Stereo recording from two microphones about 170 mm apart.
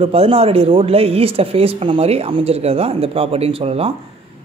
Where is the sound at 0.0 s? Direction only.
35° right (ahead or behind).